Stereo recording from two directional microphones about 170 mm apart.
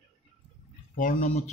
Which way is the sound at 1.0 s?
50° left (ahead or behind).